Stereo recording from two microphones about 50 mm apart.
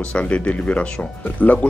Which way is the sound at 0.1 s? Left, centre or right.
Left.